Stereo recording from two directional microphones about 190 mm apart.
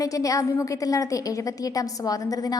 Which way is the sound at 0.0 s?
15° left (ahead or behind).